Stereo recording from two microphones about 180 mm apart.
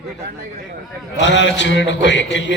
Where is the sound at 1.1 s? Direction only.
75° left (ahead or behind).